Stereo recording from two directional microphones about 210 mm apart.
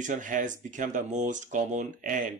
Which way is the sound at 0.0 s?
35° right (ahead or behind).